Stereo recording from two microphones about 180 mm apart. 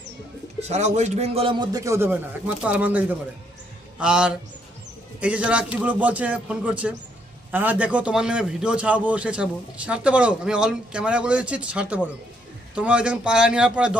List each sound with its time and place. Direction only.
0.6 s a man's voice: 40° right (ahead or behind); by 14.0 s 5° right (ahead or behind)